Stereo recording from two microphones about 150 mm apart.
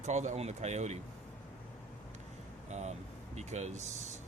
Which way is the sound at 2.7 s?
50° right (ahead or behind).